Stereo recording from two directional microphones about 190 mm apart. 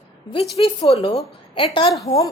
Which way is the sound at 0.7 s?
30° left (ahead or behind).